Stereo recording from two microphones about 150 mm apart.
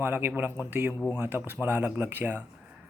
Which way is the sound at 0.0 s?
15° right (ahead or behind).